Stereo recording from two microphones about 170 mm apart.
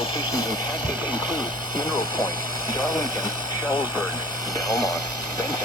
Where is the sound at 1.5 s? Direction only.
50° right (ahead or behind).